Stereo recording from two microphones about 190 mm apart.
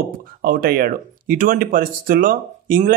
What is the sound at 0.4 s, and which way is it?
Speech, 50° right (ahead or behind).